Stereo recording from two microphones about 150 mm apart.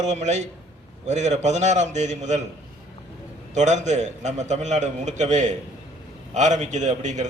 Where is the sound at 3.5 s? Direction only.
50° right (ahead or behind).